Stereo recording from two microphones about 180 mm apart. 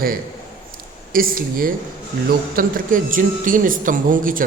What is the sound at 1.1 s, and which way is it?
Speech, 50° right (ahead or behind).